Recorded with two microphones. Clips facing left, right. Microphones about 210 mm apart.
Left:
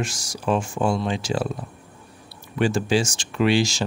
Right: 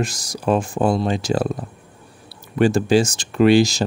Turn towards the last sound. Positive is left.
turn(degrees=-40)  # may be behind; listen again after turning